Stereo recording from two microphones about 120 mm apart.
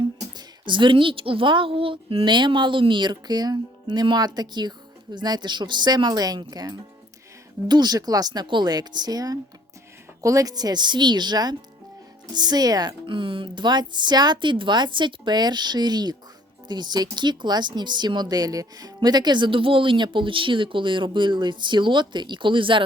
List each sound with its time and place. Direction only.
0.0 s a woman's voice: 40° right (ahead or behind)